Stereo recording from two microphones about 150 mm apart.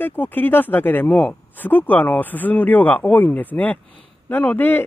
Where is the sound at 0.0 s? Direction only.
15° left (ahead or behind).